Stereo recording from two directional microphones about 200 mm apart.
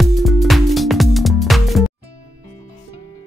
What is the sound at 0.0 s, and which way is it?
Music, centre (ahead or behind).